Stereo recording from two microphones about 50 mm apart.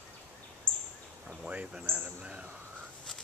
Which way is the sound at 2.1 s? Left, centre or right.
Right.